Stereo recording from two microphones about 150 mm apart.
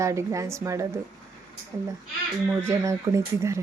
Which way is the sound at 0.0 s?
20° right (ahead or behind).